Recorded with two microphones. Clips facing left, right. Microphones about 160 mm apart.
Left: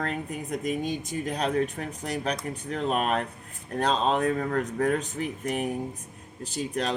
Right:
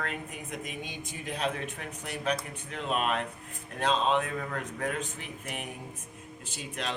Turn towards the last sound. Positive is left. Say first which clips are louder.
# left 7 dB
turn(degrees=40)  # may be behind; listen again after turning